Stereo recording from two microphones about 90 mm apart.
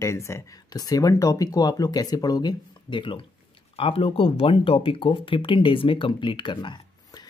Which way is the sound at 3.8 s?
90° left.